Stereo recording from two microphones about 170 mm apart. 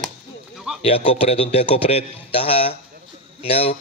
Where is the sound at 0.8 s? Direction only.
35° left (ahead or behind).